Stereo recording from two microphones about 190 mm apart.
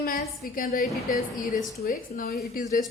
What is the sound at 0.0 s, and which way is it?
A woman's voice, 50° left (ahead or behind).